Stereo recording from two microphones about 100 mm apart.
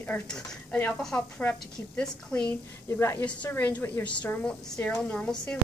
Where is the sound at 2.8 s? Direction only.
25° left (ahead or behind).